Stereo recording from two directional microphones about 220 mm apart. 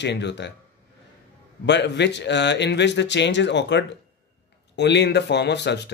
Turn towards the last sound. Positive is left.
turn(degrees=50)  # may be behind; listen again after turning